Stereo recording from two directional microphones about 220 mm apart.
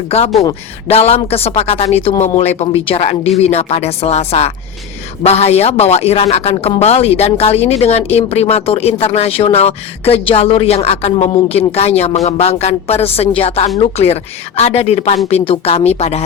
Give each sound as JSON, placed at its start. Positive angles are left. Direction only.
{"t": 0.4, "sound": "a woman's voice", "side_deg": 25}